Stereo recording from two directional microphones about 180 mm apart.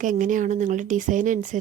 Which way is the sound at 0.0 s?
45° right (ahead or behind).